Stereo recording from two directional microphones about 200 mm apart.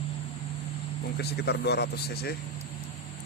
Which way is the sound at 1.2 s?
55° left (ahead or behind).